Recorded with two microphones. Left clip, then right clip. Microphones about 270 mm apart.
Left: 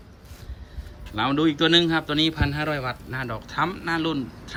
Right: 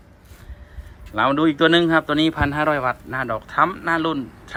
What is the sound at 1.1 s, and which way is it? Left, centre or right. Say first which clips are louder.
Speech: right 4 dB; centre.